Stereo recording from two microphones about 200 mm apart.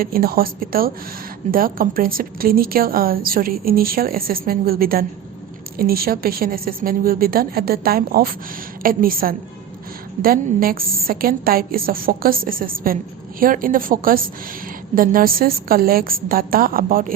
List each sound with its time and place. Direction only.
0.0 s a woman's voice: 50° right (ahead or behind)